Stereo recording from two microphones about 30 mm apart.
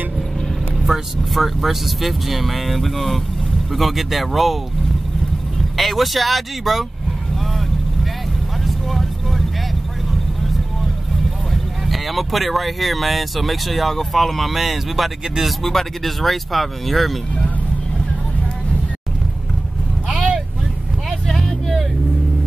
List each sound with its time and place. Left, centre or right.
0.9 s speech: centre
5.8 s speech: centre
8.6 s vehicle: centre
11.9 s speech: centre
15.6 s speech: centre
20.1 s vehicle: centre